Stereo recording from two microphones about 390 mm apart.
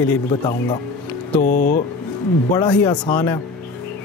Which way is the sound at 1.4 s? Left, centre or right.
Centre.